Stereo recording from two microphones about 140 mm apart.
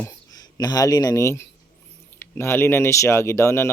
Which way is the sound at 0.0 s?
25° left (ahead or behind).